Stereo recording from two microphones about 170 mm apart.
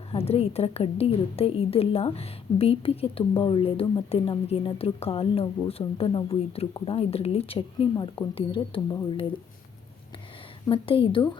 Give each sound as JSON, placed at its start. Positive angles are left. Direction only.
{"t": 0.1, "sound": "a woman's voice", "side_deg": 35}
{"t": 10.7, "sound": "a woman's voice", "side_deg": 30}